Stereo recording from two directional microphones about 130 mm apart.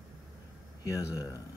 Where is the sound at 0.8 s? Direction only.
25° left (ahead or behind).